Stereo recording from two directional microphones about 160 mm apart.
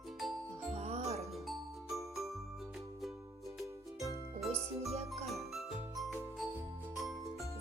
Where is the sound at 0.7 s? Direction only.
40° right (ahead or behind).